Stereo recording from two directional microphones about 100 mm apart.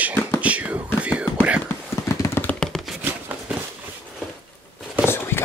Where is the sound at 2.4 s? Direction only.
5° left (ahead or behind).